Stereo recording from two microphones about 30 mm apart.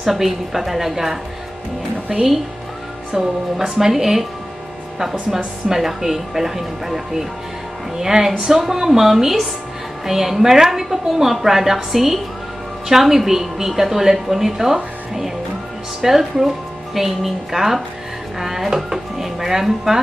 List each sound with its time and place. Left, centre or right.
0.0 s a woman's voice: centre
2.1 s a woman's voice: right
5.7 s a woman's voice: centre
18.9 s dishes: centre
19.6 s a woman's voice: centre